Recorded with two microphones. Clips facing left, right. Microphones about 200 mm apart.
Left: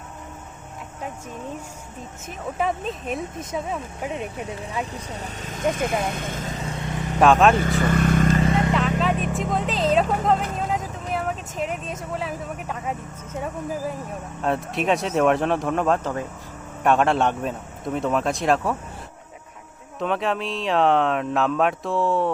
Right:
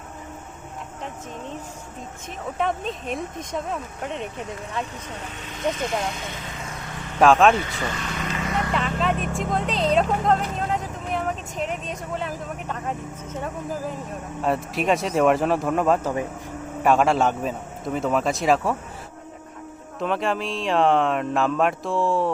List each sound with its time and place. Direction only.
2.6 s speech: centre (ahead or behind)
5.0 s speech: 35° left (ahead or behind)
5.7 s speech: 55° left (ahead or behind); by 6.7 s 35° left (ahead or behind)
7.2 s speech: centre (ahead or behind)
7.5 s speech: 45° left (ahead or behind)
8.4 s vehicle: 25° left (ahead or behind)
9.0 s speech: centre (ahead or behind)
14.4 s speech: centre (ahead or behind)
20.0 s speech: centre (ahead or behind)